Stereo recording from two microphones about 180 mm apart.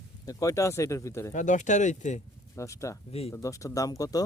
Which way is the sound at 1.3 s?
45° left (ahead or behind).